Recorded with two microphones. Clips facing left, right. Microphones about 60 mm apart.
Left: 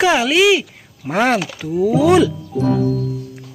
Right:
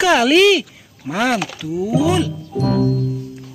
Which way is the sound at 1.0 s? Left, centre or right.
Left.